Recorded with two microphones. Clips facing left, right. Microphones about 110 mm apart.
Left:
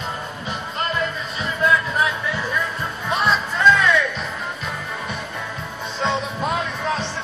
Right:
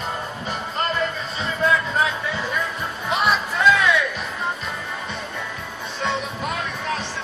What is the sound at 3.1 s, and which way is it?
Music, 10° right (ahead or behind).